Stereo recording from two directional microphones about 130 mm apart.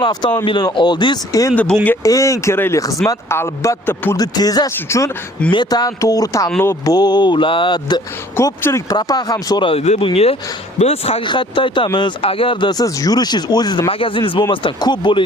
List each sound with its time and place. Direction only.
0.0 s speech: 35° left (ahead or behind)
1.5 s speech: 10° left (ahead or behind)
2.0 s speech: 25° left (ahead or behind)
4.2 s speech: 30° left (ahead or behind)
5.5 s speech: 35° left (ahead or behind)
6.9 s speech: 35° left (ahead or behind)
8.4 s speech: 20° left (ahead or behind); by 9.8 s 40° left (ahead or behind)
9.8 s speech: 55° left (ahead or behind); by 13.8 s 30° left (ahead or behind)
13.9 s speech: 40° left (ahead or behind)